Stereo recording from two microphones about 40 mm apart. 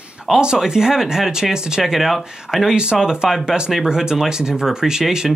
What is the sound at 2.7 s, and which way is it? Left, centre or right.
Speech, right.